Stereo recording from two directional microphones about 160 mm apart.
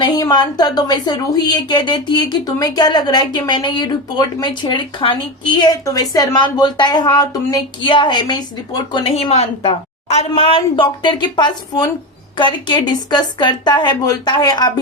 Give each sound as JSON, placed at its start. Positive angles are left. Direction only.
{"t": 0.0, "sound": "speech", "side_deg": 25}